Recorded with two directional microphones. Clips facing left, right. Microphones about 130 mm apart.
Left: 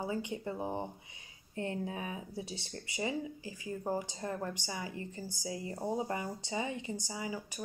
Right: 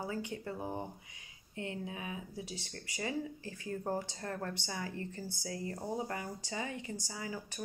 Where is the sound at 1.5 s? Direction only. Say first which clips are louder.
Left 4 dB; 40° left (ahead or behind).